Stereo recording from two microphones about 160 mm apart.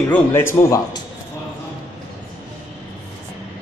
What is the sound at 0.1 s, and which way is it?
Speech, 15° left (ahead or behind).